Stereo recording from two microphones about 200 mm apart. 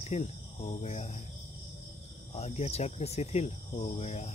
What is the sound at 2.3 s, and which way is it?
Speech, 30° left (ahead or behind).